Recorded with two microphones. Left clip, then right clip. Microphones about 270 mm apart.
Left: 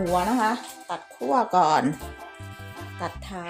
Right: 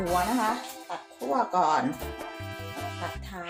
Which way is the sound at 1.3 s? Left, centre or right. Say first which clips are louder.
Left 4 dB; left.